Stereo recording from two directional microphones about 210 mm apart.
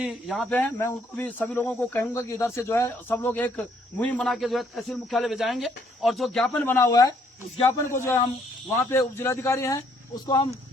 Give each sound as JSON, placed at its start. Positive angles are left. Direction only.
{"t": 0.0, "sound": "speech", "side_deg": 0}